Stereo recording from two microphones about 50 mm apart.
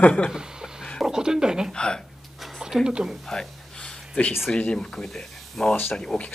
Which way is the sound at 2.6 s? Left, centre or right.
Centre.